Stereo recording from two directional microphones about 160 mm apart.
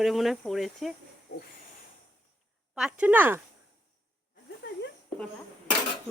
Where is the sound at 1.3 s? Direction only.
90° left.